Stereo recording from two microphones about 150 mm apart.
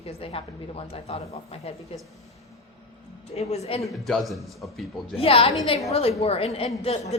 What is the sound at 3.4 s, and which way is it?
Speech, 45° left (ahead or behind).